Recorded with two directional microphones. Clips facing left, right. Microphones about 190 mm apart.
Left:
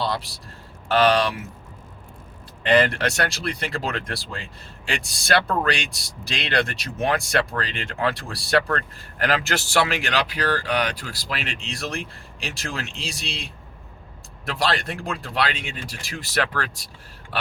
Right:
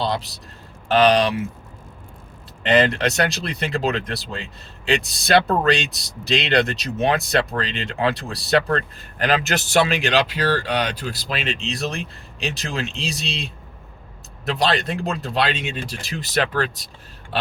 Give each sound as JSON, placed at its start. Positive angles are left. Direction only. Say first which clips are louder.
{"t": 0.0, "sound": "a man's voice", "louder": "right 2 dB", "side_deg": -20}
{"t": 2.6, "sound": "speech", "louder": "right 1 dB", "side_deg": -20}